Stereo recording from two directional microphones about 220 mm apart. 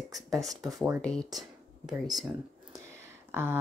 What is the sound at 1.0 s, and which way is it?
Speech, 5° left (ahead or behind).